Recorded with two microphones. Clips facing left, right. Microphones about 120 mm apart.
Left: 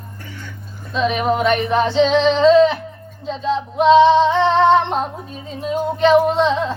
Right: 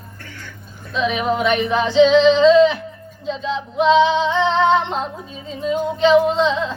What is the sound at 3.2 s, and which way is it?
Female singing, 40° left (ahead or behind).